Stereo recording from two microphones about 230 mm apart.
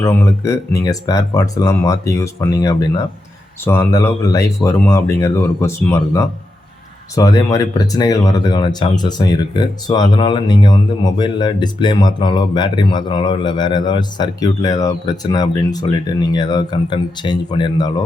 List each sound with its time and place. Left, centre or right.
0.0 s speech: centre